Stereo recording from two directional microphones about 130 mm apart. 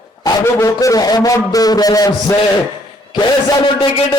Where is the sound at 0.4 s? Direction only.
25° left (ahead or behind).